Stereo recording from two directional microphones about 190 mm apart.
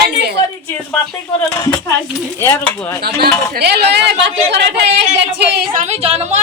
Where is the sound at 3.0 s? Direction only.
55° right (ahead or behind).